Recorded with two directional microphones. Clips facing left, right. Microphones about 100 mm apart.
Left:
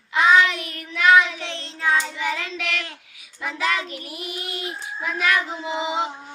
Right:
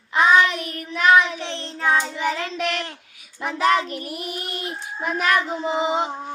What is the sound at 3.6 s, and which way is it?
Child singing, 50° right (ahead or behind).